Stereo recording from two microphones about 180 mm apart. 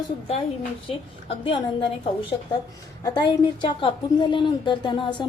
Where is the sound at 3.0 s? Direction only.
25° left (ahead or behind).